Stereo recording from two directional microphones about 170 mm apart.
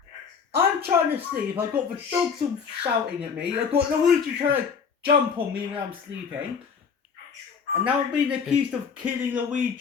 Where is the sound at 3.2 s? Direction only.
10° right (ahead or behind).